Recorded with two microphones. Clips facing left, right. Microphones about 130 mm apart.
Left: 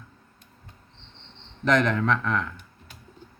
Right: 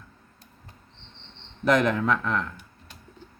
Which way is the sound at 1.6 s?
5° right (ahead or behind).